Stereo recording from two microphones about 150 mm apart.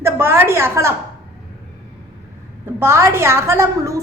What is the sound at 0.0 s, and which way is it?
Speech, 15° right (ahead or behind).